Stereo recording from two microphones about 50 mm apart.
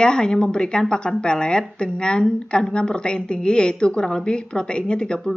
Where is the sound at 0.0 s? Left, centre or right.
Centre.